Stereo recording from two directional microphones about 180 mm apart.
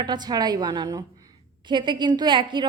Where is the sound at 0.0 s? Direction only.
25° right (ahead or behind).